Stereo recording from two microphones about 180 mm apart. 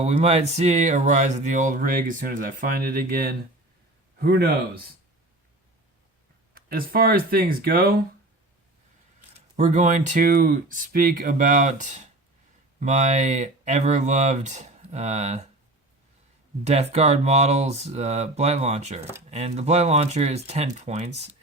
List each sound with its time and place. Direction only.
0.0 s speech: 35° right (ahead or behind); by 4.8 s 60° right (ahead or behind)
6.5 s speech: 55° right (ahead or behind)
9.6 s speech: 40° right (ahead or behind)
16.6 s speech: 40° right (ahead or behind)